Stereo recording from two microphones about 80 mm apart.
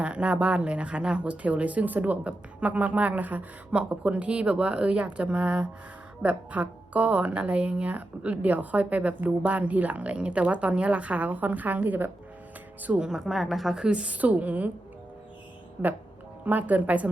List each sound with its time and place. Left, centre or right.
0.0 s speech: centre
13.1 s a woman's voice: centre
13.8 s speech: centre
15.8 s speech: right